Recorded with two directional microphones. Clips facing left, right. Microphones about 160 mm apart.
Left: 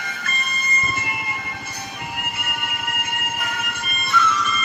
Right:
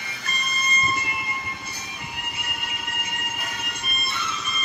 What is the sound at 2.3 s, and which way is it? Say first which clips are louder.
Music: left 5 dB; 60° left (ahead or behind).